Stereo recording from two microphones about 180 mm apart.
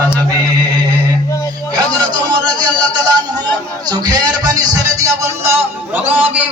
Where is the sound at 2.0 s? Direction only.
25° right (ahead or behind).